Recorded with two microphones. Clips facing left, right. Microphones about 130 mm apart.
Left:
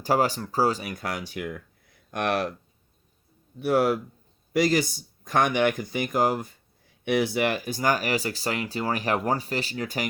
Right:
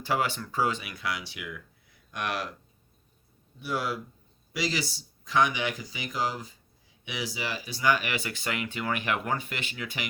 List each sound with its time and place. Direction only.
0.0 s speech: 40° left (ahead or behind)
3.6 s a man's voice: 55° left (ahead or behind); by 10.1 s 40° left (ahead or behind)